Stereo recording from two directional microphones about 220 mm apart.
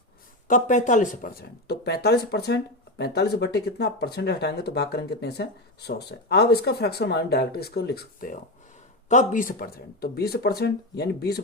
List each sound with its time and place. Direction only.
0.4 s speech: 35° left (ahead or behind)